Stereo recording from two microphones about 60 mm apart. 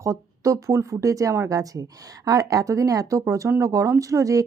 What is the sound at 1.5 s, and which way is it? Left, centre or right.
Speech, right.